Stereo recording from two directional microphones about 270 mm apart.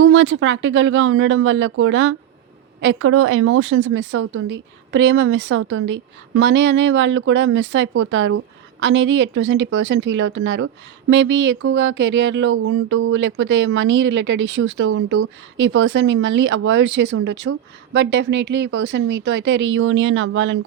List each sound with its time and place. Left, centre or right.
0.0 s speech: right